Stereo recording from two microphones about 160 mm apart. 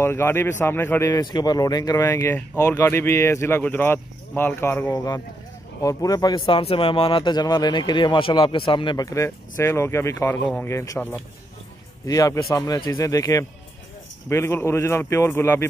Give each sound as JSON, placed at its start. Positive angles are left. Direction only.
{"t": 0.0, "sound": "speech", "side_deg": 15}